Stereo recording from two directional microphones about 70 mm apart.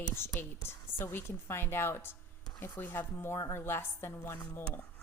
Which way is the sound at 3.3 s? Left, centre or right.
Left.